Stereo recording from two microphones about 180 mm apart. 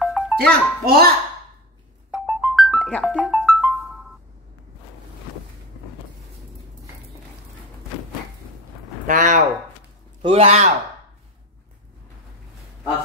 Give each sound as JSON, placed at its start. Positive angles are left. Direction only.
{"t": 0.0, "sound": "music", "side_deg": 0}
{"t": 0.4, "sound": "a child's voice", "side_deg": -60}
{"t": 2.0, "sound": "music", "side_deg": -5}
{"t": 9.0, "sound": "speech", "side_deg": -45}
{"t": 10.2, "sound": "speech", "side_deg": -35}